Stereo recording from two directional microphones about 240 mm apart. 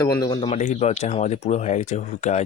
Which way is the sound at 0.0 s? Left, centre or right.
Centre.